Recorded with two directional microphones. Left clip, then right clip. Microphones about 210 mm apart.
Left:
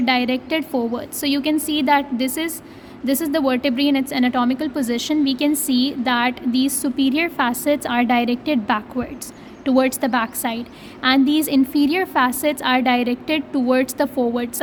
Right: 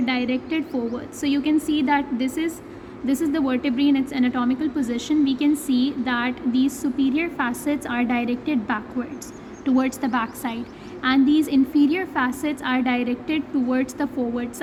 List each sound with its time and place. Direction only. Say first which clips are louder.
0.0 s a woman's voice: left 5 dB; 50° left (ahead or behind)